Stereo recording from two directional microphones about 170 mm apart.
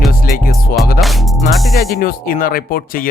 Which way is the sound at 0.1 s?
60° left (ahead or behind).